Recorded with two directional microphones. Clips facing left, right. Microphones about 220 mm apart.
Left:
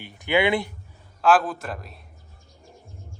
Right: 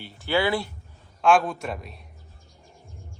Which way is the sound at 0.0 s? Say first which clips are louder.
Left 2 dB; 20° left (ahead or behind).